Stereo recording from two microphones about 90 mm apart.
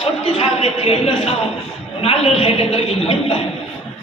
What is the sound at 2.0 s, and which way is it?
A man's voice, 90° left.